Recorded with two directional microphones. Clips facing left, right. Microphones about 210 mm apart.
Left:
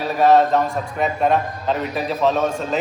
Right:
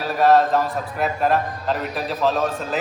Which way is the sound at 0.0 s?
Centre (ahead or behind).